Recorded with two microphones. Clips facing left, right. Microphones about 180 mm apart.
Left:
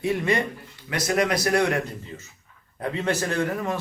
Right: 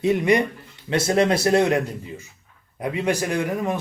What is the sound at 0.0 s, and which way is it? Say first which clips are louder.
A man's voice: right 5 dB; 20° right (ahead or behind).